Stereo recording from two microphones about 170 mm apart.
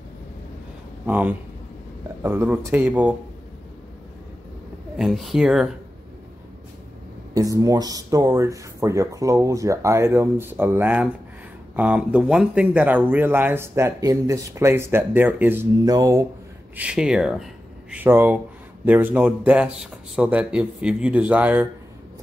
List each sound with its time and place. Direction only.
1.0 s speech: 10° right (ahead or behind)
4.9 s speech: centre (ahead or behind)
7.3 s speech: 20° right (ahead or behind)
16.7 s speech: 5° right (ahead or behind)